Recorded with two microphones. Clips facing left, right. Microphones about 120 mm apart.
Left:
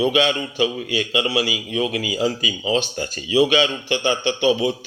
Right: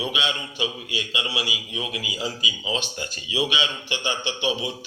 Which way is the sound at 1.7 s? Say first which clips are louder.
Left 9 dB; 55° left (ahead or behind).